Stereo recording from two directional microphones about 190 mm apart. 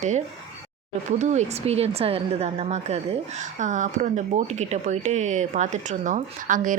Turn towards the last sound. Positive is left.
turn(degrees=-45)  # may be behind; listen again after turning